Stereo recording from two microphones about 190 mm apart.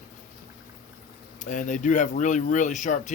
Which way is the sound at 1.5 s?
40° left (ahead or behind).